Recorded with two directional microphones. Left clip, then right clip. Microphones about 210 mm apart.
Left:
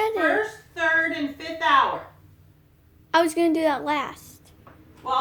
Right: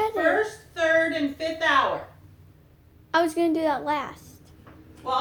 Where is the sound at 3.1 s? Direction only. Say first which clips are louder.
Left 2 dB; 30° left (ahead or behind).